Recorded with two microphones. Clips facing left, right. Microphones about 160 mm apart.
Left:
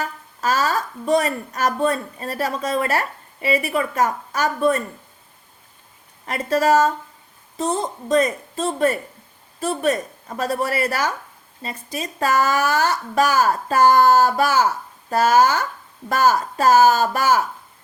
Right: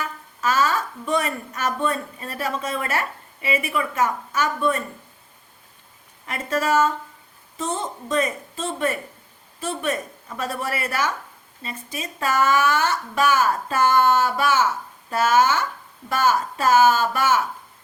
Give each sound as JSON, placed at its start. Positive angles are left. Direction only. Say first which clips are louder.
{"t": 0.0, "sound": "a woman's voice", "louder": "left 2 dB", "side_deg": 35}
{"t": 6.2, "sound": "speech", "louder": "left 5 dB", "side_deg": 35}